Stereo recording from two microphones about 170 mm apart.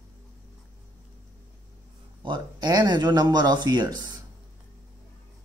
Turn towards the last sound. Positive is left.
turn(degrees=-25)  # may be behind; listen again after turning